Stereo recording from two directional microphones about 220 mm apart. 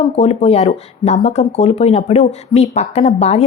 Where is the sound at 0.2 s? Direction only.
30° left (ahead or behind).